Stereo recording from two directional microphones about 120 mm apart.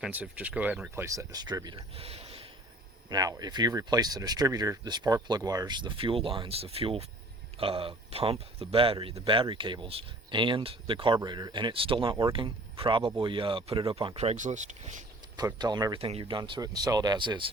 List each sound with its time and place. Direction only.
0.0 s speech: 10° right (ahead or behind)
1.0 s speech: 25° right (ahead or behind)
2.0 s a sound: 55° right (ahead or behind)
3.1 s speech: 30° right (ahead or behind)
14.2 s speech: 75° right (ahead or behind)
15.4 s speech: 35° right (ahead or behind)
16.0 s speech: 55° right (ahead or behind)
16.4 s speech: 35° right (ahead or behind)